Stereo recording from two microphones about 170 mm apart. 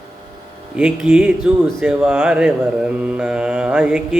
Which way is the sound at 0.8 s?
5° right (ahead or behind).